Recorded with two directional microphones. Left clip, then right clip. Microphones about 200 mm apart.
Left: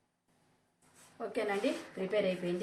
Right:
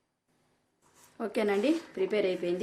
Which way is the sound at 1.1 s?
60° right (ahead or behind).